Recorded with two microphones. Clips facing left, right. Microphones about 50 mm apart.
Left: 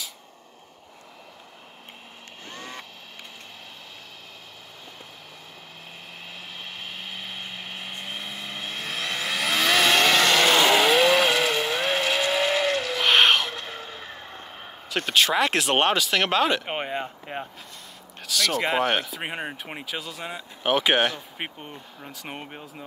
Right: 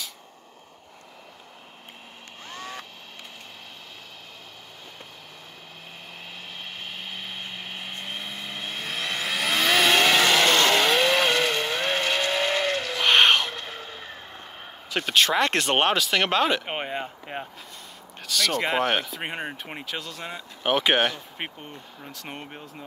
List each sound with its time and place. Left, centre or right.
6.6 s vehicle: centre
18.2 s speech: centre